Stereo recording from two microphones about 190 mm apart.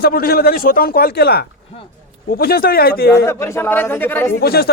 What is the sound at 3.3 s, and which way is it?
A man's voice, 15° left (ahead or behind).